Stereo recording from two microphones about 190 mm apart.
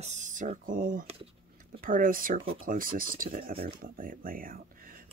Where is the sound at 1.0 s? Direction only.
30° right (ahead or behind).